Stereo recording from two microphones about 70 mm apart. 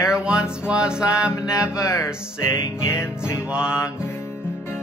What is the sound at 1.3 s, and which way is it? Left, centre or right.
Music, left.